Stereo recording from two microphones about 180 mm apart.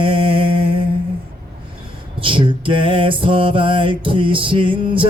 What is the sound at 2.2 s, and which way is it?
Mantra, 30° right (ahead or behind).